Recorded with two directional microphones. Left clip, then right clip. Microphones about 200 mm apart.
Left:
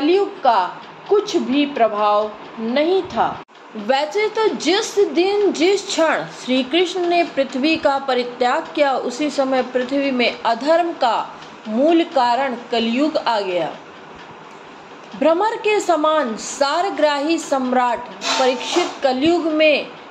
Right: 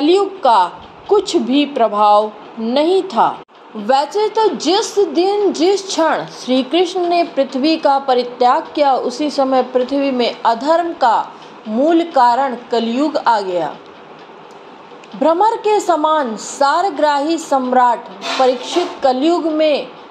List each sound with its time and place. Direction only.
0.0 s speech: 40° right (ahead or behind)
3.8 s a woman's voice: 20° right (ahead or behind)
15.1 s a woman's voice: 15° right (ahead or behind)